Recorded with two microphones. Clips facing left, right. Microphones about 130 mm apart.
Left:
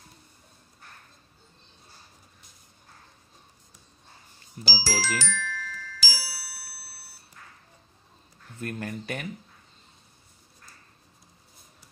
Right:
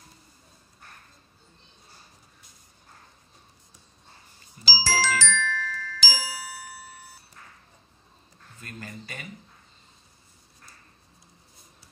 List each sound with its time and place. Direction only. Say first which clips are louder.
4.6 s speech: left 1 dB; 60° left (ahead or behind)
5.0 s glockenspiel: right 4 dB; 90° right
8.5 s speech: left 8 dB; 65° left (ahead or behind)